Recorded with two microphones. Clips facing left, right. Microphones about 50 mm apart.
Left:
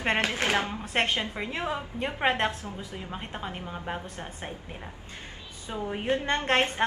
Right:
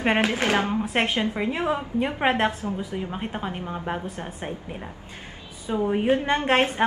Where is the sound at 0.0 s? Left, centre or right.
Centre.